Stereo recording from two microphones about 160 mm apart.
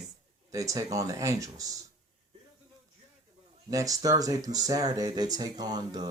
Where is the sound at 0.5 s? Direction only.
20° right (ahead or behind).